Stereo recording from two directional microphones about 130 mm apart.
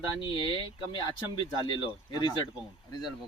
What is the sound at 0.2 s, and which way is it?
Speech, 40° left (ahead or behind).